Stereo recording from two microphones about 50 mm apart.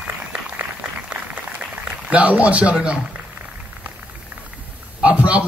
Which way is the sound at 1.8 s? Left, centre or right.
Centre.